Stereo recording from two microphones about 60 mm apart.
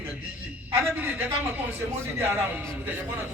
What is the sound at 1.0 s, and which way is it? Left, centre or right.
A man's voice, right.